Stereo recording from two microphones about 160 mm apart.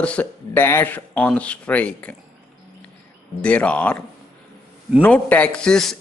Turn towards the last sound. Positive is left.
turn(degrees=5)  # may be behind; listen again after turning